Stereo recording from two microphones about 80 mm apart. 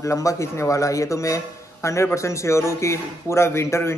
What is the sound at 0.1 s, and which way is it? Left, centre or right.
A man's voice, left.